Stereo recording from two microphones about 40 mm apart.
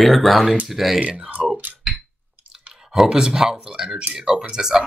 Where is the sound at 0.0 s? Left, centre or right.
Centre.